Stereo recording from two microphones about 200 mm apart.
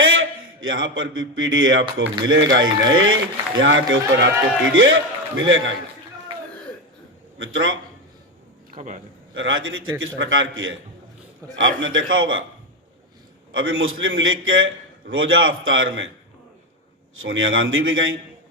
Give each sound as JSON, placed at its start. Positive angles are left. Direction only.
{"t": 0.0, "sound": "a man's voice", "side_deg": -80}
{"t": 7.3, "sound": "a man's voice", "side_deg": -80}
{"t": 8.7, "sound": "a man's voice", "side_deg": -40}
{"t": 9.3, "sound": "a man's voice", "side_deg": -80}
{"t": 10.0, "sound": "a man's voice", "side_deg": -80}
{"t": 13.5, "sound": "a man's voice", "side_deg": -80}
{"t": 17.2, "sound": "a man's voice", "side_deg": -80}